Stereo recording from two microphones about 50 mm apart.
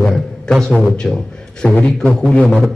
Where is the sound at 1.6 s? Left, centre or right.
Centre.